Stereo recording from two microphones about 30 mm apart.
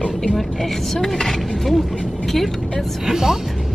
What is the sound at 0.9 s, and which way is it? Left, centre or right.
Speech, centre.